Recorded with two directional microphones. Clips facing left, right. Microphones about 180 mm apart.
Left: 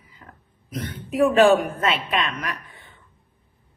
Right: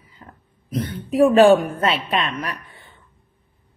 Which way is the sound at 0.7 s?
35° right (ahead or behind).